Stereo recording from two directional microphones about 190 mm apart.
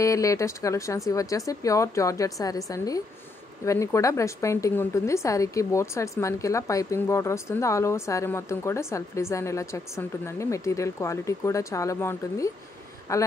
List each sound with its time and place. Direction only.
0.0 s a woman's voice: 15° left (ahead or behind)